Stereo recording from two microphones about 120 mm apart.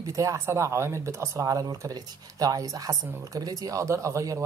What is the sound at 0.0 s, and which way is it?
A woman's voice, 25° right (ahead or behind).